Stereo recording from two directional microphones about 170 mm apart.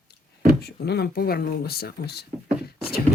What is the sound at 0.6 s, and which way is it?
Speech, 70° left (ahead or behind).